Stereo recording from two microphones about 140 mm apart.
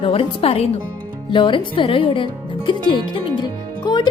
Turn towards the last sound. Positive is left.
turn(degrees=30)  # may be behind; listen again after turning